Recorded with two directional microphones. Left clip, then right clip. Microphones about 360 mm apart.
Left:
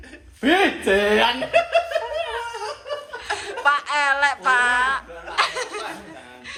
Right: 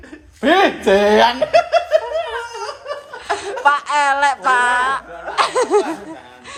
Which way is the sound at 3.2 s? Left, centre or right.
Centre.